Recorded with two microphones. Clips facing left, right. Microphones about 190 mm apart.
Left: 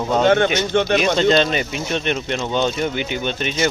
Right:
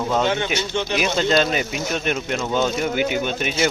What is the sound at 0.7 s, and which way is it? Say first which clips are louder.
Speech: left 7 dB; 55° left (ahead or behind).